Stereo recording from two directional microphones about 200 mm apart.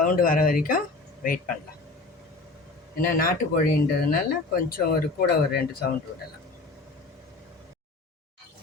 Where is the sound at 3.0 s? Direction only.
45° left (ahead or behind).